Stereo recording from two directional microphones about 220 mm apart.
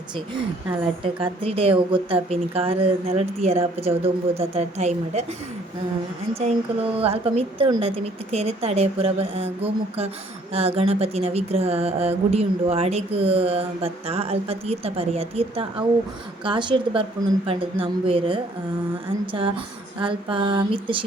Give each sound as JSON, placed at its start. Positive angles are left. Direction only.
{"t": 1.0, "sound": "speech", "side_deg": -25}
{"t": 7.0, "sound": "speech", "side_deg": -25}